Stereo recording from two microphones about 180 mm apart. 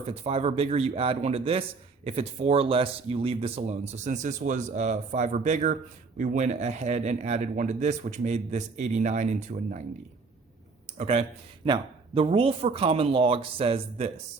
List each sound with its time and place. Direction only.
0.1 s speech: 35° right (ahead or behind)
10.9 s speech: 35° right (ahead or behind)